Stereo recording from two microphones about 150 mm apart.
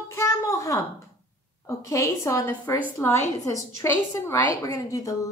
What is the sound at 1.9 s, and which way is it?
Speech, 20° left (ahead or behind).